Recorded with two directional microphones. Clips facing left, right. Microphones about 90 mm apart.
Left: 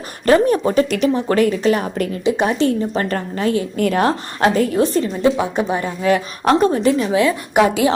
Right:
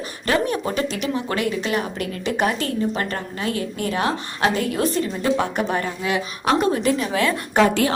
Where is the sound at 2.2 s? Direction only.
20° left (ahead or behind).